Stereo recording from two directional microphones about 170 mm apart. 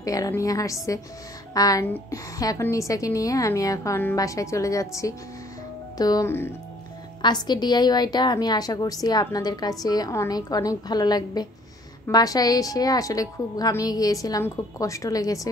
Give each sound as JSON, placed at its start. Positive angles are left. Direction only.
{"t": 0.0, "sound": "a woman's voice", "side_deg": 20}
{"t": 7.2, "sound": "a woman's voice", "side_deg": 25}